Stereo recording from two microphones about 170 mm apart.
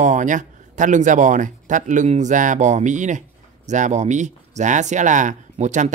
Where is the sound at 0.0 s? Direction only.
45° right (ahead or behind).